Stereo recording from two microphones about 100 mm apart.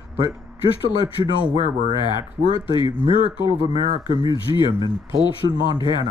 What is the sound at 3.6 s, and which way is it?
Speech, 45° right (ahead or behind).